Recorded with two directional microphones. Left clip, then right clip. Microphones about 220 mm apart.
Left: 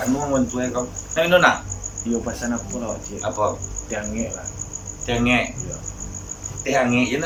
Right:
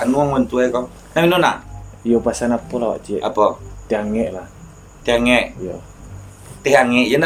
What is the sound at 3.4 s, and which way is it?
Speech, 40° right (ahead or behind).